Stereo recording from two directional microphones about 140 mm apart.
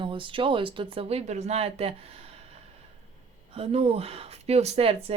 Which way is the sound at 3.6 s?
45° right (ahead or behind).